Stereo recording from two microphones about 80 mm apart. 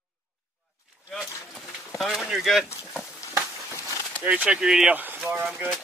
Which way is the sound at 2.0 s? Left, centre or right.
Centre.